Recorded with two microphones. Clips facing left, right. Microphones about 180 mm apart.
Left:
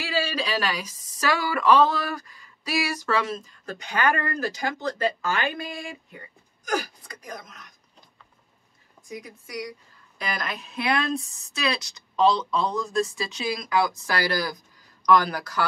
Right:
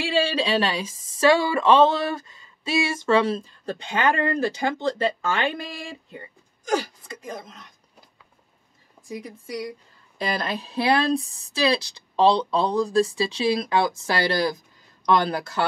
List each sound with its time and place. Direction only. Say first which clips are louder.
0.0 s speech: right 5 dB; 30° right (ahead or behind)
9.1 s speech: right 4 dB; 30° right (ahead or behind)